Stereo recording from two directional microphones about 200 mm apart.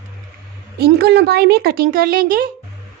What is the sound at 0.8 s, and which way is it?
A child's voice, 55° right (ahead or behind).